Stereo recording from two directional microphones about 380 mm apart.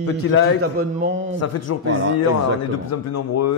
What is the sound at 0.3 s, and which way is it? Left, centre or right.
Speech, left.